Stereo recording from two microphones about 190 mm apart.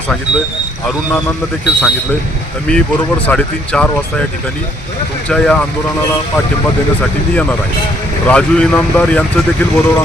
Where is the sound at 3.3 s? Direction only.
5° left (ahead or behind).